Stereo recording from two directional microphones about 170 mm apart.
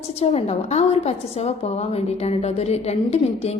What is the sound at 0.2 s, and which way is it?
A woman's voice, 35° left (ahead or behind).